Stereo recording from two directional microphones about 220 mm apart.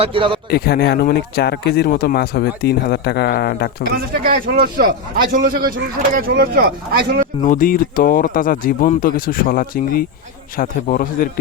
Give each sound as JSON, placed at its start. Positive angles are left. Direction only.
{"t": 0.0, "sound": "a man's voice", "side_deg": -25}
{"t": 0.5, "sound": "speech", "side_deg": 45}
{"t": 4.1, "sound": "a man's voice", "side_deg": -40}
{"t": 7.4, "sound": "speech", "side_deg": 40}